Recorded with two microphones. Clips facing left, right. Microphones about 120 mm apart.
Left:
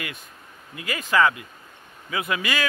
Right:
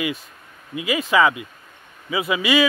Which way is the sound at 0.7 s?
5° right (ahead or behind).